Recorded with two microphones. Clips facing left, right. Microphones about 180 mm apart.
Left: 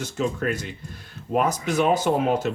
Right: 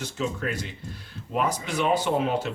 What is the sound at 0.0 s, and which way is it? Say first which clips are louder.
Speech: left 4 dB; 45° left (ahead or behind).